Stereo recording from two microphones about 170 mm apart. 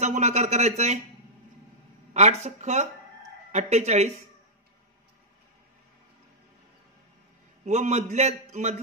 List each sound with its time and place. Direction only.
0.0 s speech: 40° right (ahead or behind)
2.1 s speech: 40° right (ahead or behind)
7.6 s a man's voice: 45° right (ahead or behind)